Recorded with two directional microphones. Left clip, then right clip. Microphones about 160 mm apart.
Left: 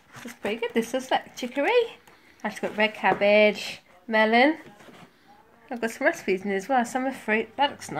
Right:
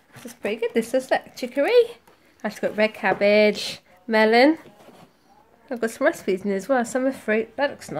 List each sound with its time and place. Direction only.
0.4 s speech: 45° right (ahead or behind)
5.7 s speech: 45° right (ahead or behind)